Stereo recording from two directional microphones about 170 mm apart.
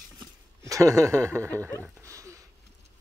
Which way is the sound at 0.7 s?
20° right (ahead or behind).